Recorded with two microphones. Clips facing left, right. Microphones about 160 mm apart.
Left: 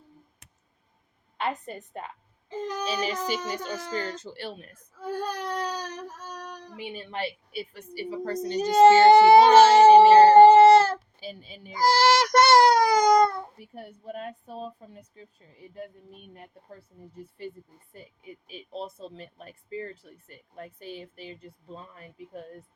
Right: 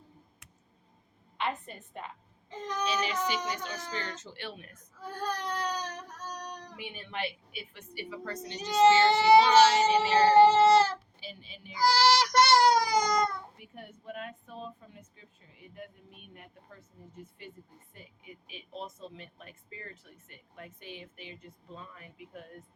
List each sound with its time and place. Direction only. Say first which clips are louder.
1.4 s speech: left 4 dB; 40° left (ahead or behind)
5.5 s baby cry: left 3 dB; 5° left (ahead or behind)
6.9 s a woman's voice: left 4 dB; 35° left (ahead or behind)
12.9 s a sound: left 8 dB; 55° left (ahead or behind)
13.6 s speech: left 5 dB; 35° left (ahead or behind)